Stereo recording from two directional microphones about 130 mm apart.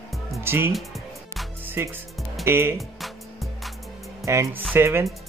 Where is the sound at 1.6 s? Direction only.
15° right (ahead or behind).